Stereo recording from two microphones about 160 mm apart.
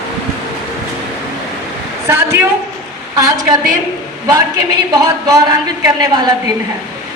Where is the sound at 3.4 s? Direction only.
55° right (ahead or behind).